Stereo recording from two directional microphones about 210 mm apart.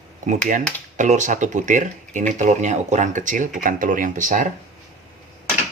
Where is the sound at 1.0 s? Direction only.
35° right (ahead or behind).